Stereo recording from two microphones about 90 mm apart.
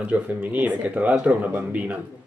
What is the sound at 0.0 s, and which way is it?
Speech, 15° right (ahead or behind).